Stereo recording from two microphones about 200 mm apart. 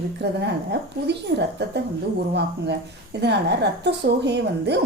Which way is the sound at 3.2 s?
60° right (ahead or behind).